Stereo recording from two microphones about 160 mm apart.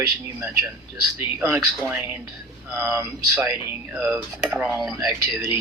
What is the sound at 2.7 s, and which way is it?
Cutlery, 10° right (ahead or behind).